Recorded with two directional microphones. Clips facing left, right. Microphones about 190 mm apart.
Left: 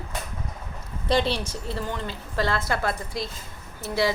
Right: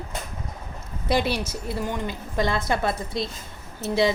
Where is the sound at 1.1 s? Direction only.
10° right (ahead or behind).